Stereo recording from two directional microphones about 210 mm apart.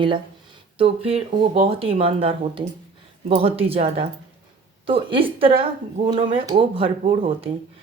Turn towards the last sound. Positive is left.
turn(degrees=-25)  # may be behind; listen again after turning